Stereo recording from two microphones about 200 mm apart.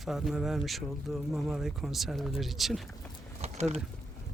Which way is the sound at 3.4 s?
35° right (ahead or behind).